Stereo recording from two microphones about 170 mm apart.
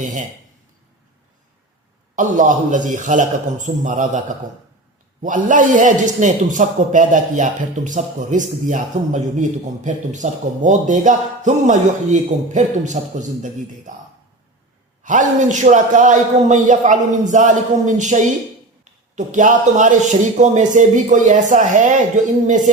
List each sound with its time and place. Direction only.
0.0 s a man's voice: 45° right (ahead or behind)
2.1 s a man's voice: 50° right (ahead or behind)
5.2 s a man's voice: 50° right (ahead or behind)
15.0 s a man's voice: 50° right (ahead or behind)